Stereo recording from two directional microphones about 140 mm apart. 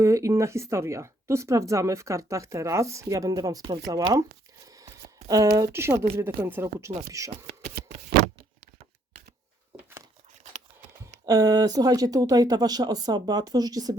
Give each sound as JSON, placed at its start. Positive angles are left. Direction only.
{"t": 0.0, "sound": "speech", "side_deg": -20}
{"t": 4.6, "sound": "a sound", "side_deg": -25}
{"t": 5.3, "sound": "speech", "side_deg": -25}
{"t": 7.8, "sound": "shuffling cards", "side_deg": -90}
{"t": 11.3, "sound": "speech", "side_deg": -25}